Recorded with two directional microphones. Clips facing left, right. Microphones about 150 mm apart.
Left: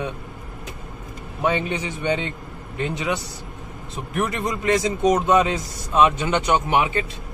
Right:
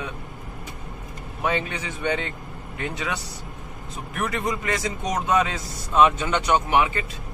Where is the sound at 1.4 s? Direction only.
25° left (ahead or behind).